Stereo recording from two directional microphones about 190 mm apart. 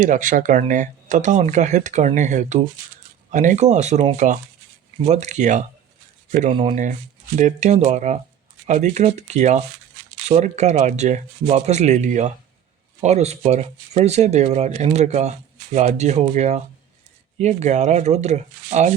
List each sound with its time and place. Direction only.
0.0 s speech: 40° right (ahead or behind)